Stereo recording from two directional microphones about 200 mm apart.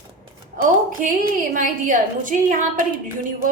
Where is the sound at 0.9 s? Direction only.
40° right (ahead or behind).